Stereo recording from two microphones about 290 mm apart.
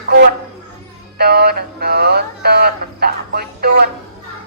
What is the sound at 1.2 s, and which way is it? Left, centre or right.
Synthetic singing, right.